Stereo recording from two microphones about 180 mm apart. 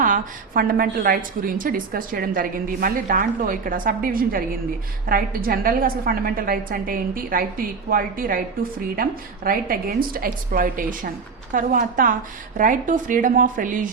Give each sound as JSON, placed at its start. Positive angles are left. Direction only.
{"t": 0.0, "sound": "a woman's voice", "side_deg": -50}